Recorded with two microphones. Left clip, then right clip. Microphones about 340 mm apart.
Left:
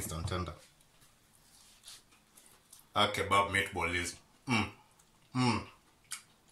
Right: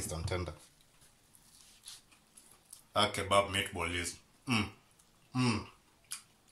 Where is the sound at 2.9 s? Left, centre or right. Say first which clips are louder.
Left 1 dB; centre.